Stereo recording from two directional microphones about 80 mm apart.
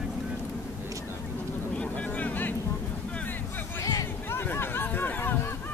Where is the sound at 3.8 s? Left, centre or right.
Left.